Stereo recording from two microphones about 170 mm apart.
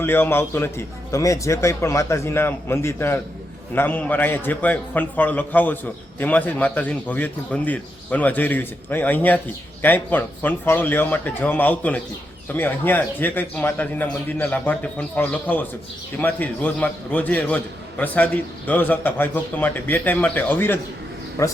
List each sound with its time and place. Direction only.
0.0 s a man's voice: 10° left (ahead or behind)